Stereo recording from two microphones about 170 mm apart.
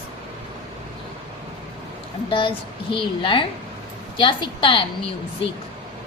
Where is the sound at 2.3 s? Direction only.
30° left (ahead or behind).